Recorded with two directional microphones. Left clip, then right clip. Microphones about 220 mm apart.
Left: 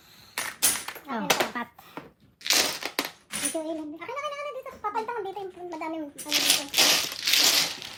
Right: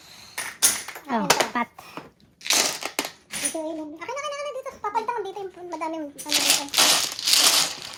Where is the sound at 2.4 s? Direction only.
5° right (ahead or behind).